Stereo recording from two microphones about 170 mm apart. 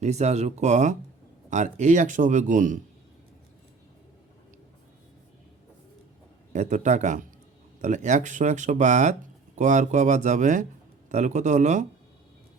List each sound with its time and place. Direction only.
0.0 s speech: 40° right (ahead or behind)
6.5 s speech: 45° right (ahead or behind)